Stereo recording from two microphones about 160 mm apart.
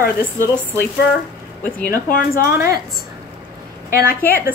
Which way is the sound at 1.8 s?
65° left (ahead or behind).